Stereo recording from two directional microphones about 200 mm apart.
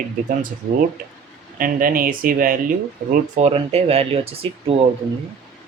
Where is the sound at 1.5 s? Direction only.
45° right (ahead or behind).